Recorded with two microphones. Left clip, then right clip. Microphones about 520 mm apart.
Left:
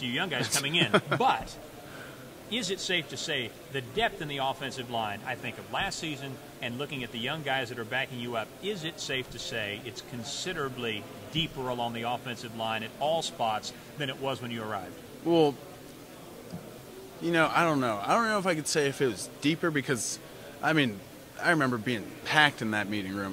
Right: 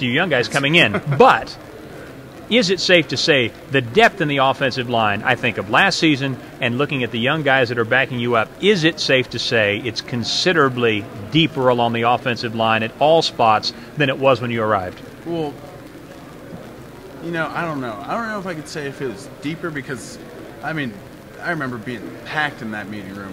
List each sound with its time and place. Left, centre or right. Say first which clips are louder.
0.0 s a man's voice: right 13 dB; right
2.5 s a man's voice: right 16 dB; right
17.3 s speech: right 2 dB; left